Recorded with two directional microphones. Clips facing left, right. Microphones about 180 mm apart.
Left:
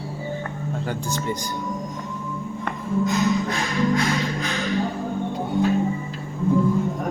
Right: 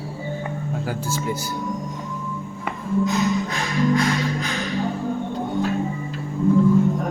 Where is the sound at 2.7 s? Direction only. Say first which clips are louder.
Right 3 dB; 5° right (ahead or behind).